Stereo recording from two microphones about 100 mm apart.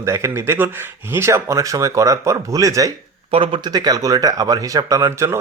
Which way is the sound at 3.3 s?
65° right (ahead or behind).